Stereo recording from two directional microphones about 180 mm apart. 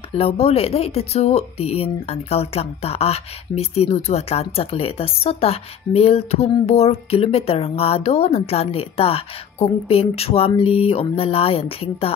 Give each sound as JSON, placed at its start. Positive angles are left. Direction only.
{"t": 0.1, "sound": "speech", "side_deg": 35}